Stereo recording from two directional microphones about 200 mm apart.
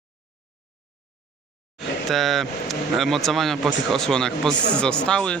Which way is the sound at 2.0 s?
Centre (ahead or behind).